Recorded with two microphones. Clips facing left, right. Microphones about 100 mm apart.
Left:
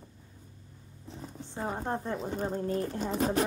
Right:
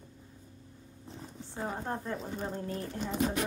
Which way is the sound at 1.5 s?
20° left (ahead or behind).